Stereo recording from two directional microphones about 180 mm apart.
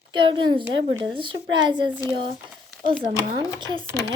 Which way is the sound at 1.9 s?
10° right (ahead or behind).